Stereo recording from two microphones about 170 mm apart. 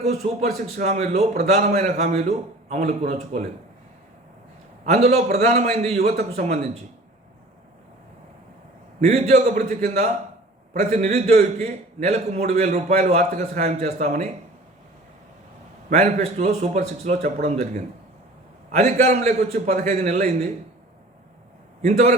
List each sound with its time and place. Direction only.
0.0 s a man's voice: 40° right (ahead or behind)
4.9 s a man's voice: 40° right (ahead or behind)
9.0 s a man's voice: 40° right (ahead or behind)
15.9 s a man's voice: 40° right (ahead or behind)
21.8 s a man's voice: 40° right (ahead or behind)